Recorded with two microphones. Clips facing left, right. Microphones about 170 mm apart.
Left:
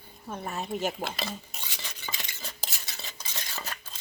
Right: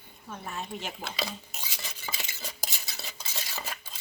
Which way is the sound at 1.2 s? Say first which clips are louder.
Even; 5° right (ahead or behind).